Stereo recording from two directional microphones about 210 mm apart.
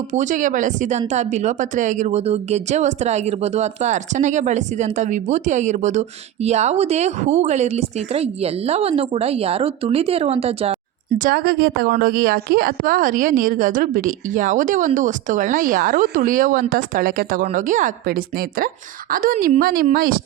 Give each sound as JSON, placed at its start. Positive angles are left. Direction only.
{"t": 0.1, "sound": "a woman's voice", "side_deg": -35}
{"t": 11.2, "sound": "a woman's voice", "side_deg": -45}